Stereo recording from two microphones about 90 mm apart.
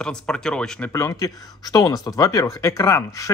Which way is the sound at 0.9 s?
35° left (ahead or behind).